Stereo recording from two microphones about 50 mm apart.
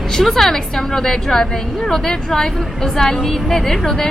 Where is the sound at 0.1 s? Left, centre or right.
Centre.